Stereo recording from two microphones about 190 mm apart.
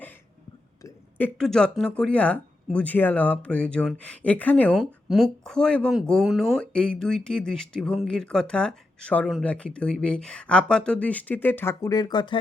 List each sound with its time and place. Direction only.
0.8 s hiccup: 15° left (ahead or behind)
1.4 s speech: 5° left (ahead or behind); by 12.4 s 25° left (ahead or behind)